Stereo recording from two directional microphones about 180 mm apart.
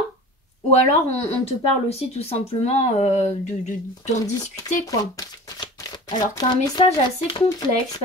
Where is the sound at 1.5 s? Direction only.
35° left (ahead or behind).